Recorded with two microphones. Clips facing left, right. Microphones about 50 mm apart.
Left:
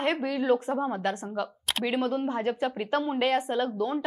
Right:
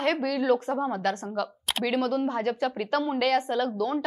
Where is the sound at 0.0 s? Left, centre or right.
Left.